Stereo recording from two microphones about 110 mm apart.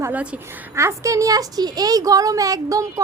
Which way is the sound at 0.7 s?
25° right (ahead or behind).